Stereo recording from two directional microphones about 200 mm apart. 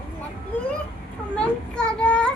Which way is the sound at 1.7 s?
5° left (ahead or behind).